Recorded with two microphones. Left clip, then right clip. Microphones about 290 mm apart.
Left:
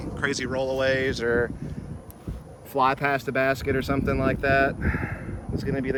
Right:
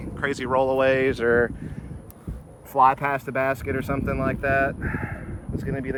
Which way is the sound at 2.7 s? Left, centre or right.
Centre.